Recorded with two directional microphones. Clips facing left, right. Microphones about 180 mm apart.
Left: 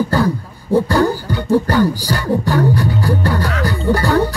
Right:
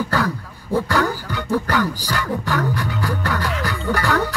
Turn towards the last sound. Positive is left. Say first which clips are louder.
# left 6 dB
turn(degrees=30)  # may be behind; listen again after turning